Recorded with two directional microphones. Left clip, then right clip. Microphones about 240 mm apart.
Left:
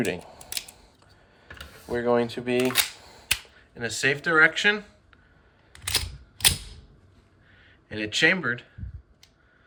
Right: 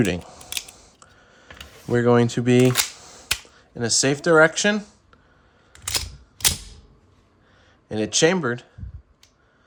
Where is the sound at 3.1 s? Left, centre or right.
Right.